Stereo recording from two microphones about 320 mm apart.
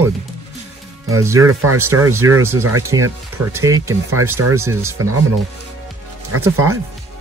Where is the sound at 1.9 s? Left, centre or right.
Centre.